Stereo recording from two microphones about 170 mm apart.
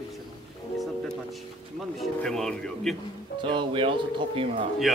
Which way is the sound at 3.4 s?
30° right (ahead or behind).